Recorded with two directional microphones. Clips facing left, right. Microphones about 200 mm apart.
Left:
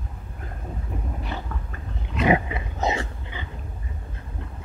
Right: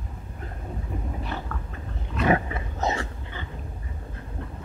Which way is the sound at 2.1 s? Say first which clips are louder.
Left 2 dB; 15° left (ahead or behind).